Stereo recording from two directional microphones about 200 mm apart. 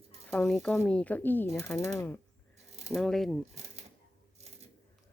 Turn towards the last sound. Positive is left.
turn(degrees=-30)  # may be behind; listen again after turning